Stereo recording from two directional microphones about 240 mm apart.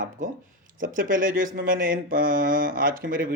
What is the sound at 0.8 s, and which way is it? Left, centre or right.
Speech, right.